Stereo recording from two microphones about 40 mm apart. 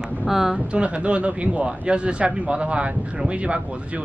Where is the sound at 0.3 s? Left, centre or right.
Centre.